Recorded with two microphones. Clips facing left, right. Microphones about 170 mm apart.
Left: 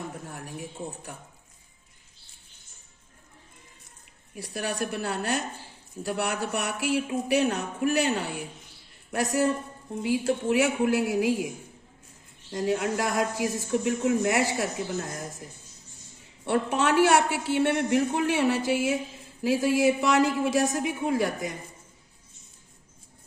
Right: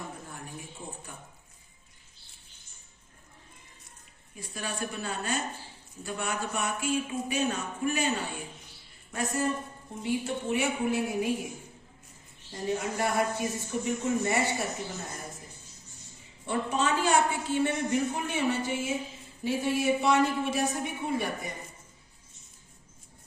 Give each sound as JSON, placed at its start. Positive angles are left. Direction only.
{"t": 0.3, "sound": "a sound", "side_deg": 75}
{"t": 4.4, "sound": "a man's voice", "side_deg": 70}
{"t": 9.1, "sound": "speech", "side_deg": 90}
{"t": 16.4, "sound": "a man's voice", "side_deg": 75}